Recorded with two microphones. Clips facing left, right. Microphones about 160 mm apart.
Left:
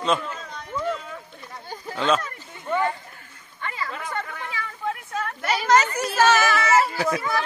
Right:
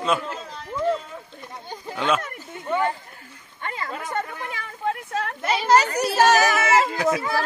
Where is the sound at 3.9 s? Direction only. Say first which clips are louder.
Right 3 dB; 40° right (ahead or behind).